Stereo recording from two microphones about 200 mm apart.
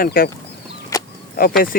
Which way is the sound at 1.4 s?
45° left (ahead or behind).